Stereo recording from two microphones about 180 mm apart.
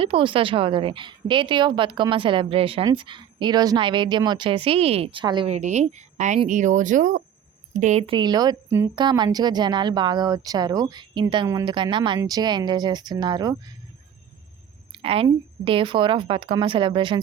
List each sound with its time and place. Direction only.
0.0 s a woman's voice: 30° right (ahead or behind)
5.5 s a woman's voice: 40° right (ahead or behind)
8.1 s a woman's voice: 25° right (ahead or behind)
14.9 s a woman's voice: 30° right (ahead or behind)